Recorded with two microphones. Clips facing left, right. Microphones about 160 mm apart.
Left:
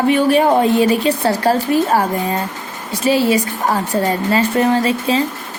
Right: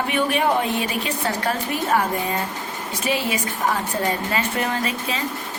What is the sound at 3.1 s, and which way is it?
Speech, 35° left (ahead or behind).